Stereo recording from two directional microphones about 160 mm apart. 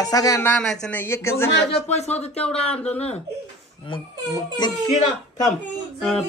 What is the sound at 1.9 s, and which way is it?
Speech, 45° left (ahead or behind).